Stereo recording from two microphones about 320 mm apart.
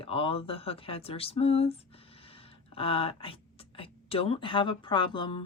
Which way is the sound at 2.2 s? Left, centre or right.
Centre.